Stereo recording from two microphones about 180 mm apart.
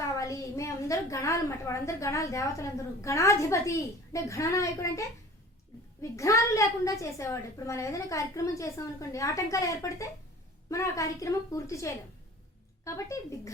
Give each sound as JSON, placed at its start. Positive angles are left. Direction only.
{"t": 0.1, "sound": "a woman's voice", "side_deg": 20}